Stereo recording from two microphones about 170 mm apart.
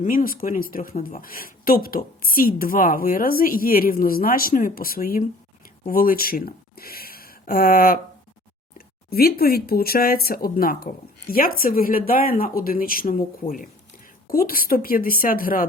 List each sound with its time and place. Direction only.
0.0 s speech: 55° left (ahead or behind)
9.0 s speech: 65° left (ahead or behind)
14.3 s speech: 60° left (ahead or behind)